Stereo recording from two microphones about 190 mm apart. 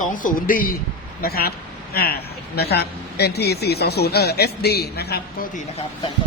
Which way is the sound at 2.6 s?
55° left (ahead or behind).